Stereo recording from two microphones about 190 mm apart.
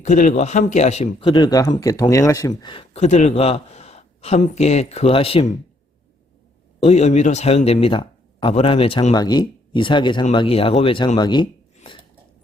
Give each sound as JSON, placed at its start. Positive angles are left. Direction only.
{"t": 0.0, "sound": "speech", "side_deg": 40}
{"t": 1.2, "sound": "a man's voice", "side_deg": 25}
{"t": 6.7, "sound": "speech", "side_deg": 35}